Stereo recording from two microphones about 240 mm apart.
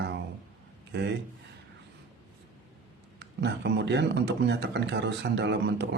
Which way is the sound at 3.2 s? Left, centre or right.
Right.